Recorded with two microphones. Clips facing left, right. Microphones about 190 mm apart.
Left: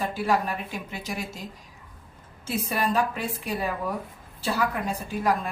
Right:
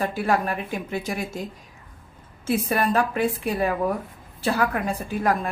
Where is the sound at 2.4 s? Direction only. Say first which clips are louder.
Right 5 dB; 55° right (ahead or behind).